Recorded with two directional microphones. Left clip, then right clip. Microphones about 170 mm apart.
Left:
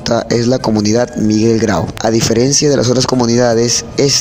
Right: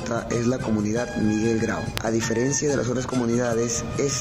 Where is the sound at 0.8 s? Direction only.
55° left (ahead or behind).